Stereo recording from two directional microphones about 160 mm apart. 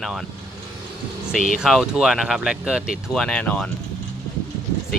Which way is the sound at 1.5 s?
Centre (ahead or behind).